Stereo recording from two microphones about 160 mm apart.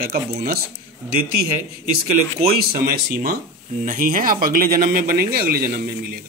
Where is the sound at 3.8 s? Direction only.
55° right (ahead or behind).